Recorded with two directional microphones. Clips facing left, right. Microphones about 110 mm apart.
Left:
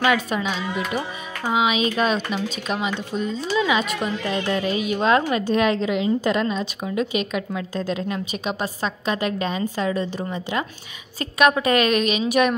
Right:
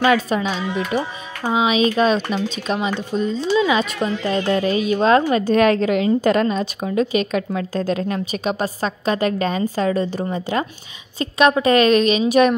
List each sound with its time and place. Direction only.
0.0 s a woman's voice: 35° right (ahead or behind)
1.5 s a woman's voice: 30° right (ahead or behind)
11.1 s a woman's voice: 25° right (ahead or behind)